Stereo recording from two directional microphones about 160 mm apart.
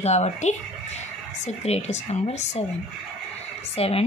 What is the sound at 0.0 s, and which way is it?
Speech, 45° left (ahead or behind).